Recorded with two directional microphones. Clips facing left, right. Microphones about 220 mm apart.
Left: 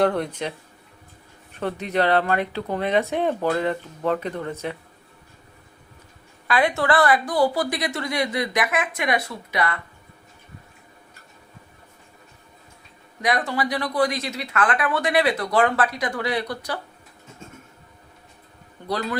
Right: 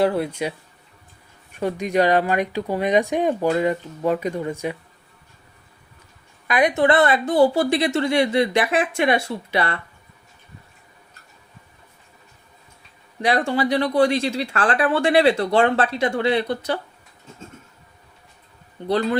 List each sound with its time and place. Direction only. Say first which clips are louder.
0.0 s speech: right 1 dB; 5° right (ahead or behind)
1.5 s speech: right 3 dB; 10° right (ahead or behind)
6.5 s speech: right 3 dB; 20° right (ahead or behind)
13.2 s speech: right 4 dB; 30° right (ahead or behind)
18.8 s speech: right 5 dB; 20° right (ahead or behind)